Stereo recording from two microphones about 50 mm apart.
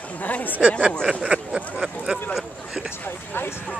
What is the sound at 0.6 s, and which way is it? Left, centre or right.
Speech, right.